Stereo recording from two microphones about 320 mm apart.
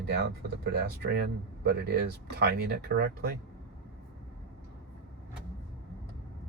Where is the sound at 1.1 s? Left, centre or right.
Right.